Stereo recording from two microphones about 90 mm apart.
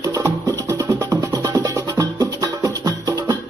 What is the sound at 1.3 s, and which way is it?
Music, 40° right (ahead or behind).